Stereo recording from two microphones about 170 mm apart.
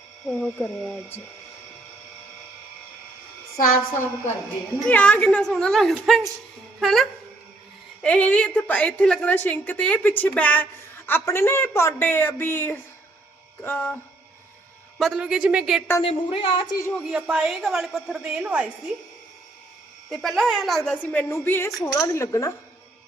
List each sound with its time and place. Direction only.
0.3 s a woman's voice: 5° left (ahead or behind)
4.9 s a woman's voice: 10° left (ahead or behind)
14.9 s a woman's voice: centre (ahead or behind)
16.0 s a woman's voice: 30° left (ahead or behind)
16.9 s a woman's voice: 5° right (ahead or behind)
20.1 s a woman's voice: centre (ahead or behind); by 22.5 s 15° left (ahead or behind)